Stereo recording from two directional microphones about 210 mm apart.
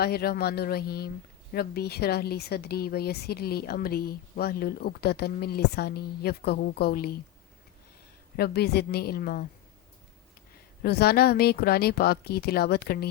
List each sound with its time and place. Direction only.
0.0 s a woman's voice: 45° left (ahead or behind)
8.4 s a woman's voice: 50° left (ahead or behind)
10.8 s a woman's voice: 50° left (ahead or behind)